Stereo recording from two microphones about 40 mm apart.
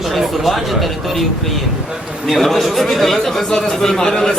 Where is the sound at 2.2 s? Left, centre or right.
Centre.